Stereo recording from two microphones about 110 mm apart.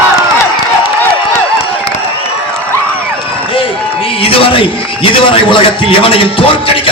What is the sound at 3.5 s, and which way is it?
A man's voice, 55° left (ahead or behind).